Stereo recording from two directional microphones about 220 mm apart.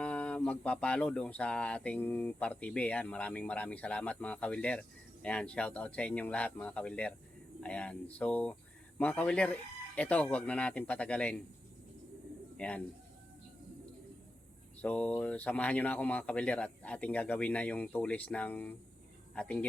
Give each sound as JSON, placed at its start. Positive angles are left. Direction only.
{"t": 0.0, "sound": "speech", "side_deg": 5}
{"t": 12.5, "sound": "speech", "side_deg": 5}
{"t": 14.8, "sound": "speech", "side_deg": 5}